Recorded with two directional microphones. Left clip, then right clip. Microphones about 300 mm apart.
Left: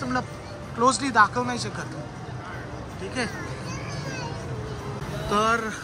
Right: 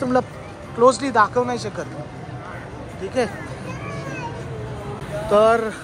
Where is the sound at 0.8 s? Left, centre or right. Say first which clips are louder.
Right 4 dB; centre.